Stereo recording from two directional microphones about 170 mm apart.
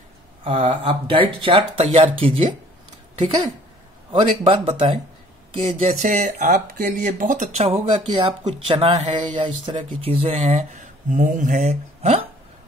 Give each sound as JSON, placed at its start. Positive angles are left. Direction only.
{"t": 0.4, "sound": "speech", "side_deg": -35}
{"t": 4.1, "sound": "speech", "side_deg": -35}